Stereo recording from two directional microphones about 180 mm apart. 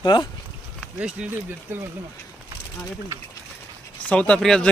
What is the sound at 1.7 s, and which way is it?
Speech, 10° right (ahead or behind).